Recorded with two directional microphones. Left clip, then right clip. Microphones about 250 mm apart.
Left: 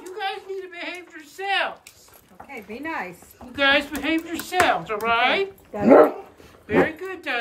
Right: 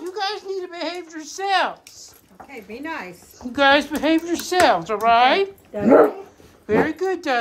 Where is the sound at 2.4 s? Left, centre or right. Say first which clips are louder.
Even; centre.